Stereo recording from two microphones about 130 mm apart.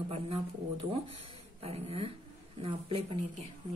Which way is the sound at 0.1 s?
50° right (ahead or behind).